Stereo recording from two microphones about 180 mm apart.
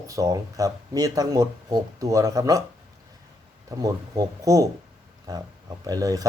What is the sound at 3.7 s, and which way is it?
Speech, 20° right (ahead or behind).